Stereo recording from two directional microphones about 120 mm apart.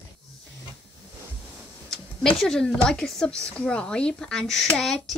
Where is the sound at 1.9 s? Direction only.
5° left (ahead or behind).